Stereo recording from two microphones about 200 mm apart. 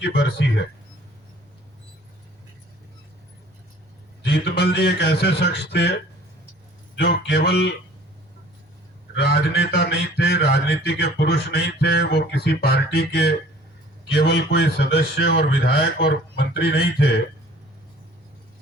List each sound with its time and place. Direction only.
0.0 s a man's voice: 55° left (ahead or behind)
4.2 s a man's voice: 55° left (ahead or behind)
6.9 s a man's voice: 60° left (ahead or behind)
9.1 s a sound: 55° left (ahead or behind)
14.1 s a man's voice: 60° left (ahead or behind)